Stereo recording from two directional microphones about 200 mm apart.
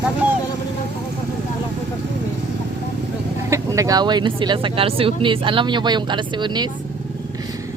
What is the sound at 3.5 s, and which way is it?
Speech, 15° right (ahead or behind).